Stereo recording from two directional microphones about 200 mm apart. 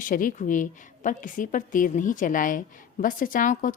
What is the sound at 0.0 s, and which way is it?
A woman's voice, 40° left (ahead or behind).